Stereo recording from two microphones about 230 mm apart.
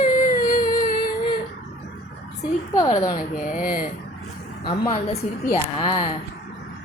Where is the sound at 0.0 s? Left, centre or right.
Left.